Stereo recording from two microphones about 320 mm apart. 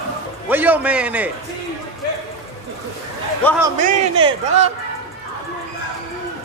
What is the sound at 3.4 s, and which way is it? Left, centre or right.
Speech, centre.